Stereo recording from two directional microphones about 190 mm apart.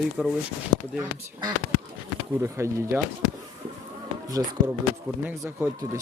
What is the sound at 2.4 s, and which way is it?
Speech, 15° right (ahead or behind).